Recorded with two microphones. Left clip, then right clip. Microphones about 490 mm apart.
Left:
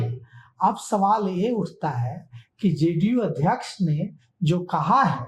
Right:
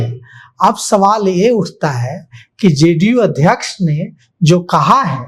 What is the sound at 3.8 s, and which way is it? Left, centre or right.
Speech, right.